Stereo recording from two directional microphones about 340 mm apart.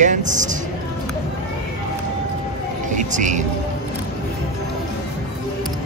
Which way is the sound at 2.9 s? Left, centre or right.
Right.